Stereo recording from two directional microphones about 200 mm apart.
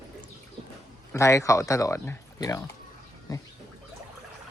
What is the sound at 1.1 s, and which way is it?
Speech, 15° left (ahead or behind).